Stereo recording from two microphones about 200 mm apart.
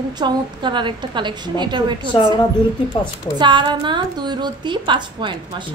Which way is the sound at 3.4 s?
25° right (ahead or behind).